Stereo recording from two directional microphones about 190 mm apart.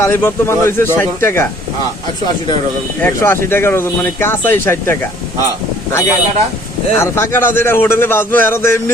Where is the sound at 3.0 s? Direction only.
10° left (ahead or behind).